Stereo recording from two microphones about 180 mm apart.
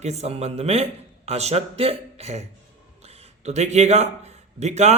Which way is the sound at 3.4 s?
40° right (ahead or behind).